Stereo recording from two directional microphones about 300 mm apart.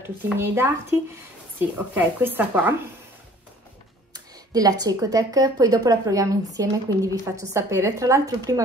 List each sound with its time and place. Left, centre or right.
0.0 s speech: centre
4.1 s speech: centre